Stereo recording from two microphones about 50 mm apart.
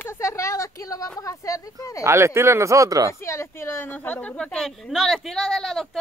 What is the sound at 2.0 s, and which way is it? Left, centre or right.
Speech, right.